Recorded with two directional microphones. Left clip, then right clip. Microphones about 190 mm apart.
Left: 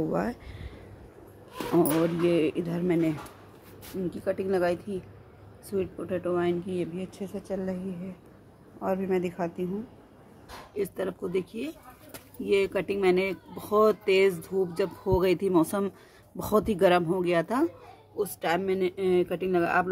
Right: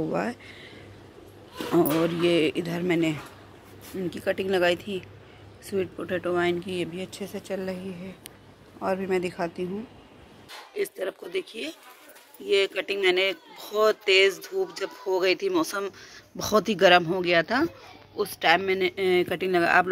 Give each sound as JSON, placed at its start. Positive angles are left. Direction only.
{"t": 0.1, "sound": "speech", "side_deg": 10}
{"t": 2.2, "sound": "speech", "side_deg": 5}
{"t": 8.8, "sound": "speech", "side_deg": -5}
{"t": 10.8, "sound": "speech", "side_deg": 0}